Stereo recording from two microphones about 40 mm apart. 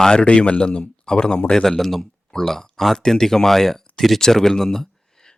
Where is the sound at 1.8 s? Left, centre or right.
Centre.